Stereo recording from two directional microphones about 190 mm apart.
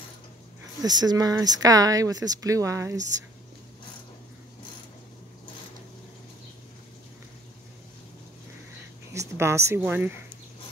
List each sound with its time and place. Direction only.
0.8 s speech: 20° right (ahead or behind)
9.1 s a woman's voice: 15° right (ahead or behind)